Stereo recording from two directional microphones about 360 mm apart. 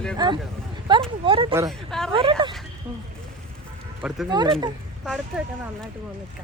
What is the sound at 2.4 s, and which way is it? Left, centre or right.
Speech, centre.